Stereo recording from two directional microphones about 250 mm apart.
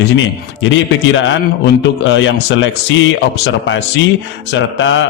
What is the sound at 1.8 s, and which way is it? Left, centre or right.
A man's voice, left.